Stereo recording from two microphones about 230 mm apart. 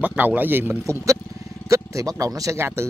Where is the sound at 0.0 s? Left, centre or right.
Centre.